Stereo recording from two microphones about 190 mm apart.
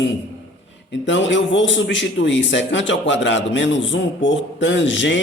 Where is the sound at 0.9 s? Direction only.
75° left (ahead or behind).